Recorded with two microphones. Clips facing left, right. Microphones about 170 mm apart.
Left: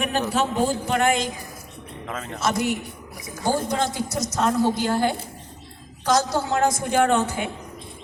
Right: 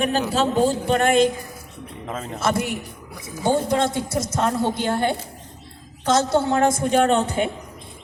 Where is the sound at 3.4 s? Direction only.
25° right (ahead or behind).